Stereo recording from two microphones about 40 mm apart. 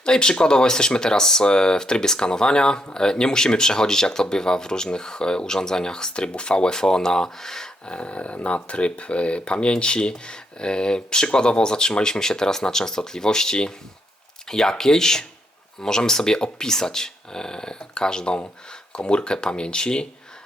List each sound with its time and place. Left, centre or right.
0.0 s speech: left
7.9 s speech: left